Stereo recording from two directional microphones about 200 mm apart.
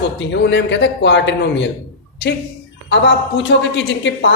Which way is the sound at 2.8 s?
65° left (ahead or behind).